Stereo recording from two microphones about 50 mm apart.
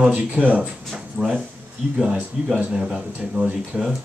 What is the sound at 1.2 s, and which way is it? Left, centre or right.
Speech, right.